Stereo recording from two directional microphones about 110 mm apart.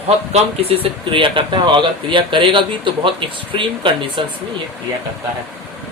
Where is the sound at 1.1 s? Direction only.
50° right (ahead or behind).